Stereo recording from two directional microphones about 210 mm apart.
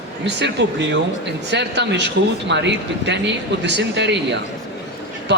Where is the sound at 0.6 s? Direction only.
55° right (ahead or behind).